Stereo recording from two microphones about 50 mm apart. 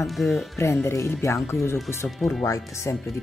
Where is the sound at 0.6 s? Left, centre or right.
Left.